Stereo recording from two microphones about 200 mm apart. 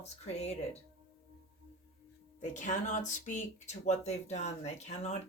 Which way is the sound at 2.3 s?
40° left (ahead or behind).